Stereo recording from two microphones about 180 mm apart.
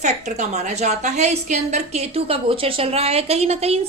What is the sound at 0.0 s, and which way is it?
A woman's voice, 40° right (ahead or behind).